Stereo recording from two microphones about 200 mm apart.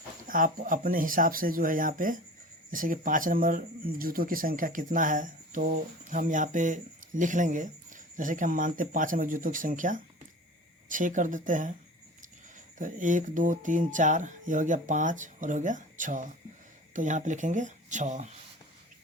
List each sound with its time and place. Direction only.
0.3 s speech: 45° right (ahead or behind)
12.8 s speech: 40° right (ahead or behind)